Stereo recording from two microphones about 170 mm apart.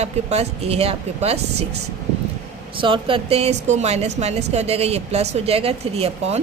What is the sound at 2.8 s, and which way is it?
Speech, 30° right (ahead or behind).